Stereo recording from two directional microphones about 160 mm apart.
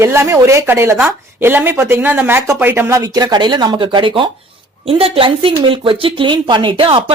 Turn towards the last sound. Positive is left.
turn(degrees=-35)  # may be behind; listen again after turning